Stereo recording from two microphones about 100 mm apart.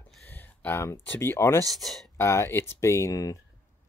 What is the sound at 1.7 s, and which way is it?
Speech, centre (ahead or behind).